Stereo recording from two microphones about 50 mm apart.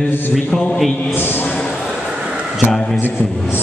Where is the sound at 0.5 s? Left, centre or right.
Centre.